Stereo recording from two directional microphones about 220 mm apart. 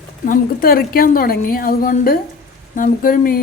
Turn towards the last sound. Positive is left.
turn(degrees=40)  # may be behind; listen again after turning